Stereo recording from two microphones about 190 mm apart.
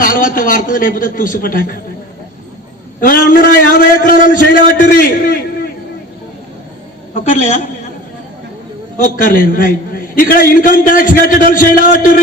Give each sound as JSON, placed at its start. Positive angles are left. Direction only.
{"t": 0.0, "sound": "a man's voice", "side_deg": 45}
{"t": 3.0, "sound": "a man's voice", "side_deg": 50}
{"t": 7.3, "sound": "a woman's voice", "side_deg": 40}
{"t": 9.0, "sound": "a man's voice", "side_deg": 45}